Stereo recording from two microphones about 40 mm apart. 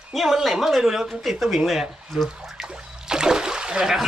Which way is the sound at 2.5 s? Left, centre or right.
Centre.